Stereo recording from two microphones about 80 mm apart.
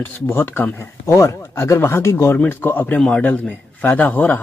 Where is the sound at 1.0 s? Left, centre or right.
Left.